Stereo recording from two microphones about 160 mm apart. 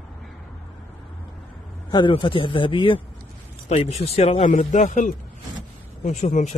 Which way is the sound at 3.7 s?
40° left (ahead or behind).